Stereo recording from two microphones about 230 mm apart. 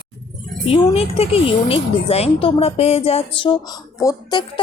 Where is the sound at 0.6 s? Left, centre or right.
Left.